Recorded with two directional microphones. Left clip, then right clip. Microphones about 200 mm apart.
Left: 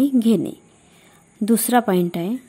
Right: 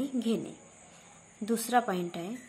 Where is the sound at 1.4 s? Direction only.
45° left (ahead or behind).